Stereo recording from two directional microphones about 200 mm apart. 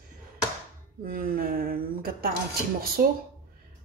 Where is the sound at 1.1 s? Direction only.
45° right (ahead or behind).